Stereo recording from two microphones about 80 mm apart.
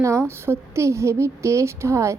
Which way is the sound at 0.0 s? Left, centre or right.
Right.